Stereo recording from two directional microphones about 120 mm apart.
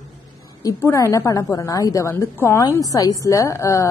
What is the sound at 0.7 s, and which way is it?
A woman's voice, 25° left (ahead or behind).